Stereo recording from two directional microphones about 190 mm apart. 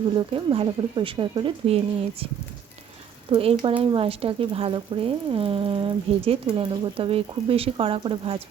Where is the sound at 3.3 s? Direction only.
30° right (ahead or behind).